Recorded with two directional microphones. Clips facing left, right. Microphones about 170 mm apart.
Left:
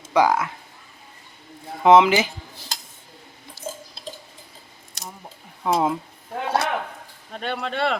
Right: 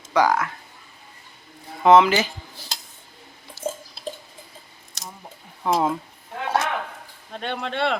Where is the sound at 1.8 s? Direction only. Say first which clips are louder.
Left 1 dB; 15° left (ahead or behind).